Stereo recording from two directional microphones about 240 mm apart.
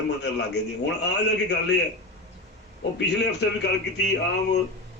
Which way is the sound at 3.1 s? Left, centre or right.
Left.